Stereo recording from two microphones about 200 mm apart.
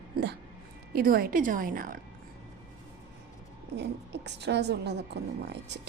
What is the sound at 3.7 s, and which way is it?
A woman's voice, 60° right (ahead or behind).